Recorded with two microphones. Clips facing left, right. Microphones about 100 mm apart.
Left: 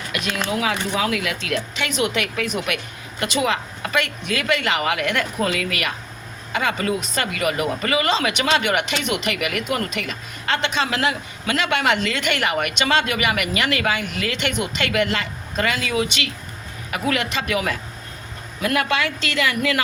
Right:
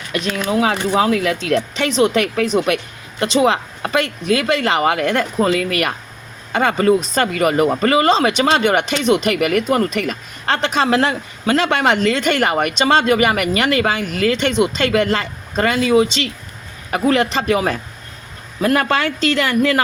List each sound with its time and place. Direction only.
0.1 s speech: 35° right (ahead or behind)